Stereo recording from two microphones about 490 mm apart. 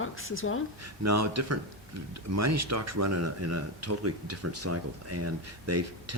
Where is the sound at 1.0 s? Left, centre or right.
Right.